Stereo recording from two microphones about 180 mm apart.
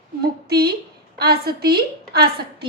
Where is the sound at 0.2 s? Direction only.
60° right (ahead or behind).